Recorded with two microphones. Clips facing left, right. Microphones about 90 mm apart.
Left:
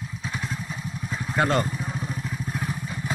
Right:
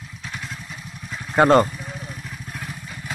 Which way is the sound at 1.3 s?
50° right (ahead or behind).